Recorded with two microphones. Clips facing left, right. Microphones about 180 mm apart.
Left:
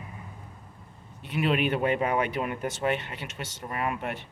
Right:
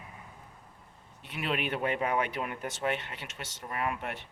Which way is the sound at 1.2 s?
5° left (ahead or behind).